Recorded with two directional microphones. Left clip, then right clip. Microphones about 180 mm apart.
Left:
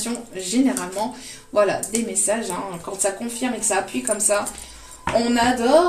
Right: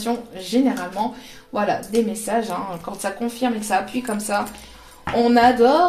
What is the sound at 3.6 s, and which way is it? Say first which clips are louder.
Speech: right 1 dB; 40° right (ahead or behind).